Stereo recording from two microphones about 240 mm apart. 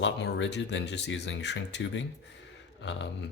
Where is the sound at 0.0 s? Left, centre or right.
Left.